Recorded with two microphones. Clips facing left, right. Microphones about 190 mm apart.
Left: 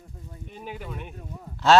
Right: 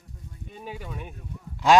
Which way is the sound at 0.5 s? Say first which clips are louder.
Left 1 dB; centre (ahead or behind).